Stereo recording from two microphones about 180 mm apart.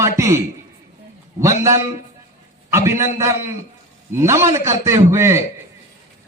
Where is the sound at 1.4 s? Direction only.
15° right (ahead or behind).